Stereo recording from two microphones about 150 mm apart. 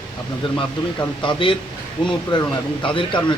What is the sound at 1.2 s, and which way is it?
Speech, 35° left (ahead or behind).